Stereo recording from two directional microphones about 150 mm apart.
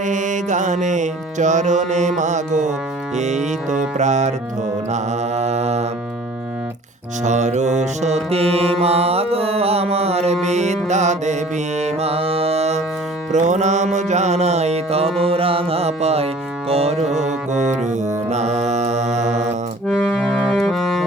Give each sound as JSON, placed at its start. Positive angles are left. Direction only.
{"t": 0.0, "sound": "music", "side_deg": -55}
{"t": 4.9, "sound": "mantra", "side_deg": -45}
{"t": 7.3, "sound": "mantra", "side_deg": -50}
{"t": 10.4, "sound": "music", "side_deg": -50}
{"t": 19.9, "sound": "accordion", "side_deg": 5}